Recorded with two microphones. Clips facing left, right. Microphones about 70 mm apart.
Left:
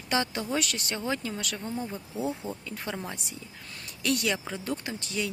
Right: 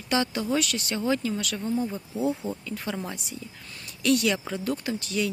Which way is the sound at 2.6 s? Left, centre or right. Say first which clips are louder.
Right 3 dB; left.